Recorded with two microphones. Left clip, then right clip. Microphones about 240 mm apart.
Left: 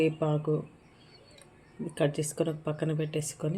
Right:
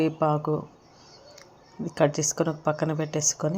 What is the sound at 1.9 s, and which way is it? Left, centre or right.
A woman's voice, right.